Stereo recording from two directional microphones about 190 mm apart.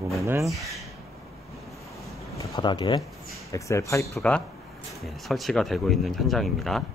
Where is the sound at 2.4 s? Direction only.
25° left (ahead or behind).